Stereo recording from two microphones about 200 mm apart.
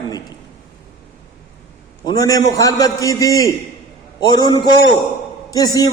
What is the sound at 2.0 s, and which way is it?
A man's voice, 20° left (ahead or behind).